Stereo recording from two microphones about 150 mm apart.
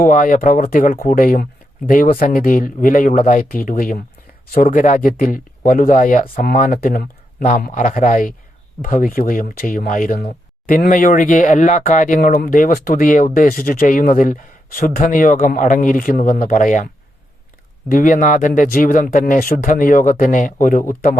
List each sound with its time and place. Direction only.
0.0 s speech: 65° left (ahead or behind)